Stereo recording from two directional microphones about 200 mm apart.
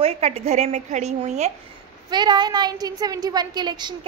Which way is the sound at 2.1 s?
20° right (ahead or behind).